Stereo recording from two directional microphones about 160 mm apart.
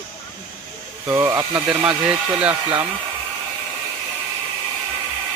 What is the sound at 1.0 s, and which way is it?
Speech, 15° right (ahead or behind).